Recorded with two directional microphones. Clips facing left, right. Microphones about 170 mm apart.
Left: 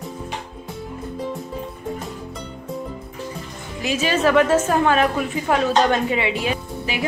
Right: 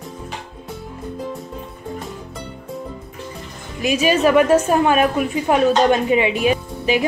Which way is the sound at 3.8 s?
15° right (ahead or behind).